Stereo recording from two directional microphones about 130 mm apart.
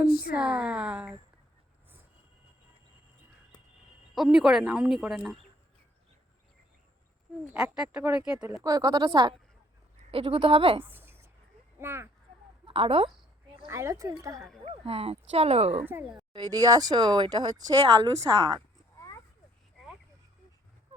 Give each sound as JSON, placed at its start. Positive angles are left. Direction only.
{"t": 0.0, "sound": "speech", "side_deg": -5}
{"t": 4.1, "sound": "speech", "side_deg": -5}
{"t": 7.4, "sound": "speech", "side_deg": -5}
{"t": 8.6, "sound": "speech", "side_deg": -30}
{"t": 10.1, "sound": "speech", "side_deg": -45}
{"t": 10.8, "sound": "a sound", "side_deg": -15}
{"t": 11.8, "sound": "speech", "side_deg": -20}
{"t": 12.6, "sound": "a woman's voice", "side_deg": -45}
{"t": 13.7, "sound": "speech", "side_deg": -20}
{"t": 14.6, "sound": "speech", "side_deg": -45}
{"t": 15.8, "sound": "speech", "side_deg": -15}
{"t": 16.3, "sound": "speech", "side_deg": -30}
{"t": 18.9, "sound": "a sound", "side_deg": 25}